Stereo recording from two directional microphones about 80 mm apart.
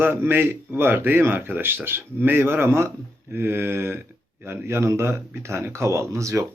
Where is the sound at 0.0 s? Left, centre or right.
Right.